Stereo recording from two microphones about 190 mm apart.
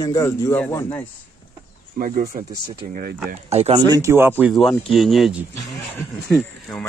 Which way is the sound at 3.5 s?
35° right (ahead or behind).